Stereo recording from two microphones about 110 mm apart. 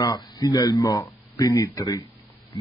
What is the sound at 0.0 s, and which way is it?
A man's voice, 35° left (ahead or behind).